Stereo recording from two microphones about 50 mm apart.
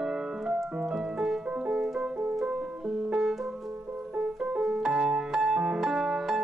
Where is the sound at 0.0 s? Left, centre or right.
Centre.